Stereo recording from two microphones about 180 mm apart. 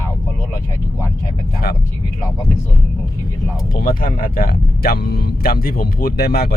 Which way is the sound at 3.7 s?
55° left (ahead or behind).